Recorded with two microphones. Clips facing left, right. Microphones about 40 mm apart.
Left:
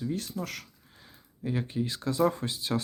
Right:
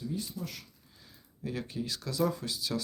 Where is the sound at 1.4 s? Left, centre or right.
Left.